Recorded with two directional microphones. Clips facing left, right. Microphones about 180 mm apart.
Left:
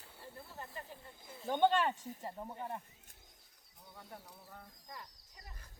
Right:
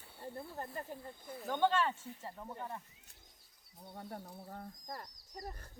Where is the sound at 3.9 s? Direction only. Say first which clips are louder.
Right 6 dB; 45° right (ahead or behind).